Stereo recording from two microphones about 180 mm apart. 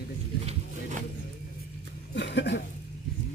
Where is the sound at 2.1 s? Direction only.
70° left (ahead or behind).